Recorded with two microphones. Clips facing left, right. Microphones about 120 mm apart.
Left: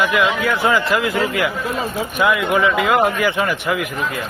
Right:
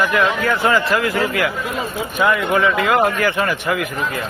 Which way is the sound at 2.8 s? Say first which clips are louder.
Even; 15° left (ahead or behind).